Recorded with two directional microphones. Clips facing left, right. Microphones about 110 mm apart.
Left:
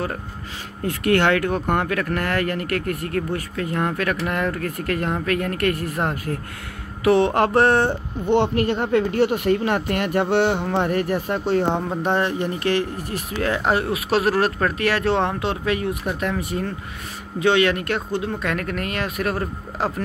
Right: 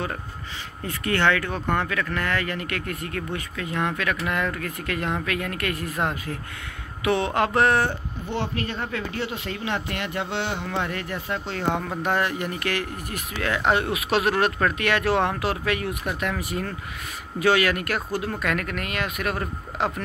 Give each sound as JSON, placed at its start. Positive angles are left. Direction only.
{"t": 0.8, "sound": "speech", "side_deg": 60}
{"t": 7.0, "sound": "speech", "side_deg": 35}
{"t": 8.3, "sound": "speech", "side_deg": 65}
{"t": 11.5, "sound": "speech", "side_deg": 30}